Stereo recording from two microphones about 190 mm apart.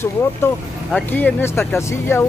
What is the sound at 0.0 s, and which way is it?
Speech, 15° left (ahead or behind).